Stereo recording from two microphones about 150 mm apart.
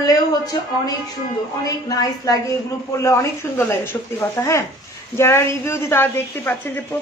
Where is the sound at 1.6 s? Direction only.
25° left (ahead or behind).